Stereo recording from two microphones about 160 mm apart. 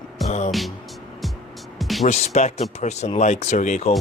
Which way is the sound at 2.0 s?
45° left (ahead or behind).